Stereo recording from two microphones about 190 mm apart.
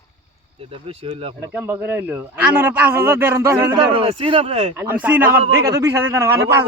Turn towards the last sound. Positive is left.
turn(degrees=-15)  # may be behind; listen again after turning